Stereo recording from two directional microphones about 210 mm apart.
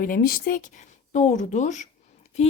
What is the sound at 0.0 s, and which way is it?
A woman's voice, 40° left (ahead or behind).